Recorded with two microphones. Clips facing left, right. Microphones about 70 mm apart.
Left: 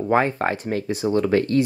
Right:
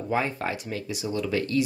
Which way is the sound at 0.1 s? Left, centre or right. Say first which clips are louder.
Left 7 dB; left.